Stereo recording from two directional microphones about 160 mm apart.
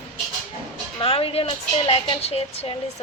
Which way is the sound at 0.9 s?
35° left (ahead or behind).